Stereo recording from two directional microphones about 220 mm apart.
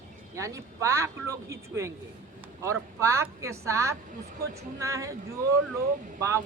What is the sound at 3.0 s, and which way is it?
Speech, 10° right (ahead or behind).